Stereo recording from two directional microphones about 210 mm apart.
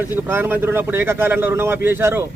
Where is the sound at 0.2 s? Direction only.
10° right (ahead or behind).